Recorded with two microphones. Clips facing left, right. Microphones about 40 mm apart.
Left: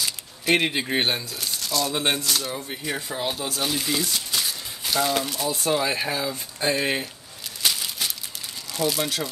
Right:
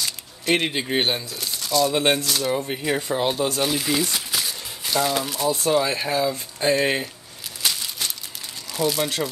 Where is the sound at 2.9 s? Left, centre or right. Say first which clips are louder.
Right 5 dB; centre.